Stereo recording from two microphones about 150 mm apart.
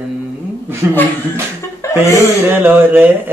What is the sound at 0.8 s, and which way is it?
Speech, 15° right (ahead or behind).